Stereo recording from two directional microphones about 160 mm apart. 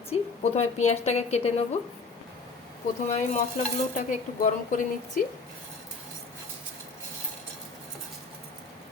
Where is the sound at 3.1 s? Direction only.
50° left (ahead or behind).